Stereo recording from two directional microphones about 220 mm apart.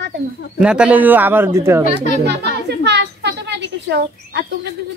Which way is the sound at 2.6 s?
50° right (ahead or behind).